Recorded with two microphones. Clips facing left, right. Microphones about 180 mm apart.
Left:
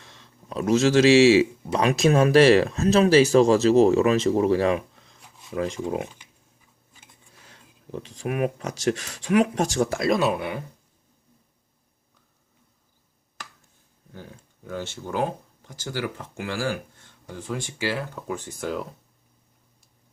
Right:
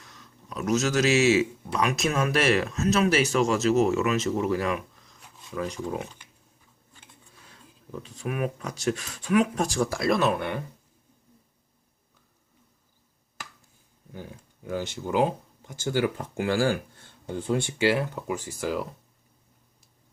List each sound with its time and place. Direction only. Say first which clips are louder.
0.0 s a man's voice: left 1 dB; 30° left (ahead or behind)
7.3 s speech: left 1 dB; 30° left (ahead or behind)
10.2 s speech: left 1 dB; 5° left (ahead or behind)
14.1 s speech: right 2 dB; 15° right (ahead or behind)
18.3 s speech: even; 5° right (ahead or behind)